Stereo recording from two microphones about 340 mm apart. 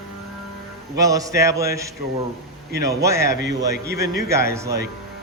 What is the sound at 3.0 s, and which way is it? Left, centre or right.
Speech, centre.